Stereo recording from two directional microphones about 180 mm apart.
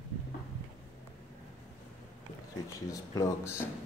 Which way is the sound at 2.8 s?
20° left (ahead or behind).